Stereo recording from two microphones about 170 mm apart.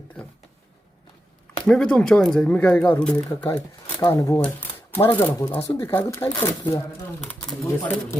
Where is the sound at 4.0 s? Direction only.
20° left (ahead or behind).